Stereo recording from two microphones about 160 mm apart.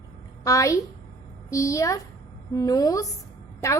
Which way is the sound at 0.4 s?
20° left (ahead or behind).